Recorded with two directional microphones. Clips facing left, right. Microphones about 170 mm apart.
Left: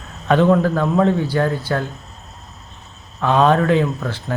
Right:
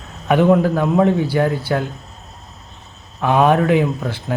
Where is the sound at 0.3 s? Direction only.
15° right (ahead or behind).